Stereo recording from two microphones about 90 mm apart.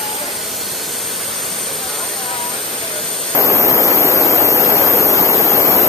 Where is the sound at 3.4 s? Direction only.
35° right (ahead or behind).